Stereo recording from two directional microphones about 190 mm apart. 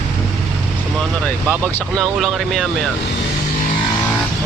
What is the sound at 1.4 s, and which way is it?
Speech, 5° left (ahead or behind).